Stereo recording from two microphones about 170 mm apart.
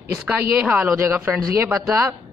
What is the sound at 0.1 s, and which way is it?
A man's voice, 10° right (ahead or behind).